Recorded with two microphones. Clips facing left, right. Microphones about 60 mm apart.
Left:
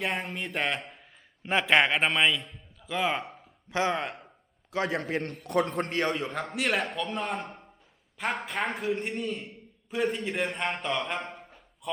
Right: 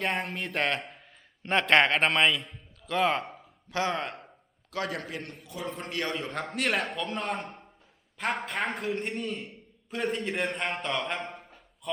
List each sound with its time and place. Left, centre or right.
0.0 s a man's voice: centre
3.7 s a man's voice: centre; by 5.3 s left
5.4 s a man's voice: left
5.9 s a man's voice: left
6.2 s a man's voice: centre